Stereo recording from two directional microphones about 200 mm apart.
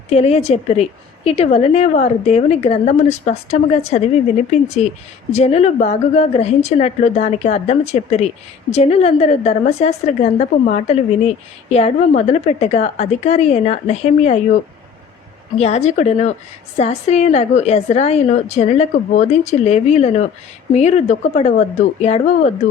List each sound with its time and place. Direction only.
0.1 s a woman's voice: 30° left (ahead or behind)
15.5 s a woman's voice: 35° left (ahead or behind)